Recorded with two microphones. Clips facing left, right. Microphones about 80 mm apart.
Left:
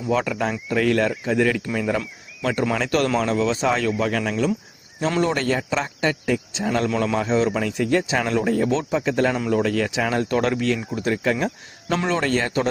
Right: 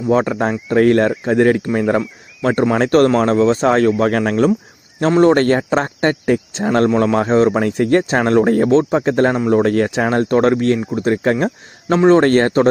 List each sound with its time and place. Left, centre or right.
0.1 s speech: right